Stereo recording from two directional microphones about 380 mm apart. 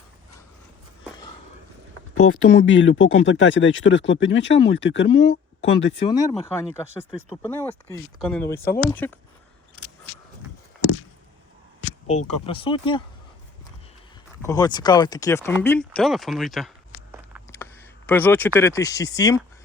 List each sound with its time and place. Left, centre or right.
2.1 s speech: left
6.1 s speech: centre
12.5 s speech: centre
14.4 s speech: centre